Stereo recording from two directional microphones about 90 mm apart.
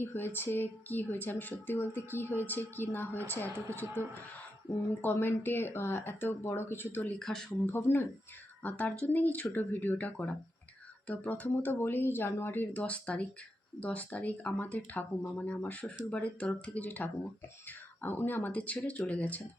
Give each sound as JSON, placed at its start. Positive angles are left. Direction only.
{"t": 0.0, "sound": "speech", "side_deg": 25}
{"t": 5.0, "sound": "speech", "side_deg": 20}
{"t": 7.2, "sound": "speech", "side_deg": 5}
{"t": 7.7, "sound": "speech", "side_deg": 25}